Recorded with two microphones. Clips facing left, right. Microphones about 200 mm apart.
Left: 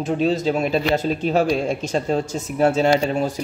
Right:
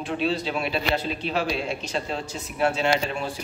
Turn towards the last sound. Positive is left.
turn(degrees=40)  # may be behind; listen again after turning